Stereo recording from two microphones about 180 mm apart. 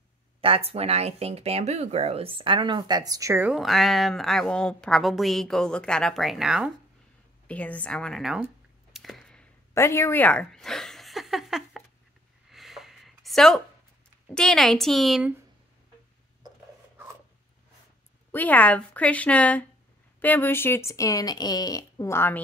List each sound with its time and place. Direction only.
0.4 s speech: 30° right (ahead or behind); by 6.7 s 5° right (ahead or behind)
7.4 s speech: 10° left (ahead or behind)
8.9 s a sound: centre (ahead or behind)
14.3 s speech: 5° left (ahead or behind)
18.3 s speech: 10° left (ahead or behind)